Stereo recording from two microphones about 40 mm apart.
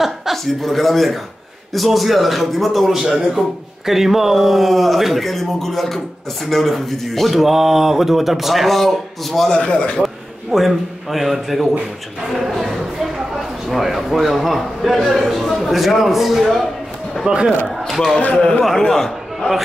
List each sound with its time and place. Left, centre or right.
0.0 s chuckle: centre
0.6 s speech: centre
9.5 s speech: left
10.0 s a man's voice: centre
17.3 s a man's voice: centre
17.7 s a sound: centre
18.6 s a man's voice: centre